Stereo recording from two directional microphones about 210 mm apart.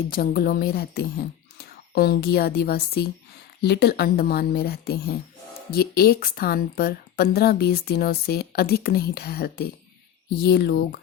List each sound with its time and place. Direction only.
0.1 s a woman's voice: 45° left (ahead or behind)